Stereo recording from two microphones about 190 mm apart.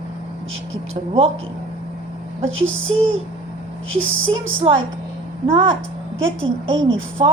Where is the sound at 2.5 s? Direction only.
90° right.